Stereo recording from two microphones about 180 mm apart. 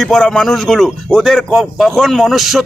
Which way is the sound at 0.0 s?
5° left (ahead or behind).